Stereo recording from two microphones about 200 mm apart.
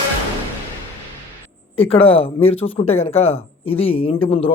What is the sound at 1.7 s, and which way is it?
Speech, 30° left (ahead or behind).